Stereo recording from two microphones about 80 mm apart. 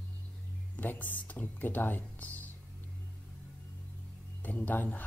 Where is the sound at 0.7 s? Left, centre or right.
Left.